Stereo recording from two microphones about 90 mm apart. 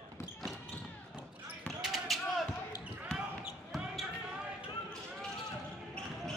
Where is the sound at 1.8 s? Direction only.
5° right (ahead or behind).